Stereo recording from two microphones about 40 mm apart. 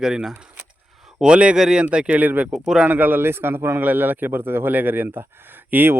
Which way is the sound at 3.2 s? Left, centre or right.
Right.